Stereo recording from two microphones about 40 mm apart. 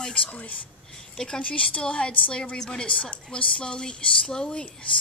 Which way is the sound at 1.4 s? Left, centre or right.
Left.